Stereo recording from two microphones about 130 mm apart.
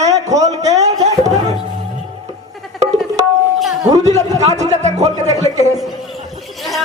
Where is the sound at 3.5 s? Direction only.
Centre (ahead or behind).